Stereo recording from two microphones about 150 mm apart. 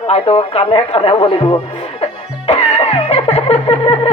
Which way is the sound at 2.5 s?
45° left (ahead or behind).